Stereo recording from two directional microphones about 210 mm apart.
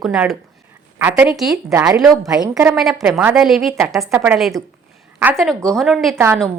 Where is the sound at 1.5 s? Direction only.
15° right (ahead or behind).